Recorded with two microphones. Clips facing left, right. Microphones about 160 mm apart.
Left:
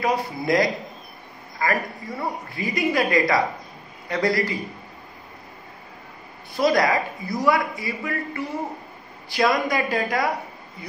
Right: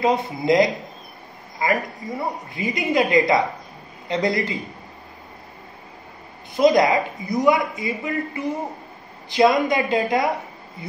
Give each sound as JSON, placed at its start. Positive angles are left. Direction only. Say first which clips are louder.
{"t": 0.0, "sound": "a man's voice", "louder": "right 3 dB", "side_deg": -20}
{"t": 6.5, "sound": "a man's voice", "louder": "right 4 dB", "side_deg": -20}